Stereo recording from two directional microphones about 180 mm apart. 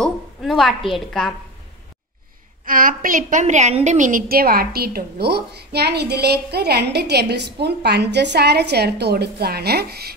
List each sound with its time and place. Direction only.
0.0 s a woman's voice: centre (ahead or behind)
2.6 s a woman's voice: 50° right (ahead or behind)